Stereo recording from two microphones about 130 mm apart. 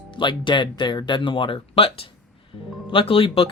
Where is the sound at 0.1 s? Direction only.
40° left (ahead or behind).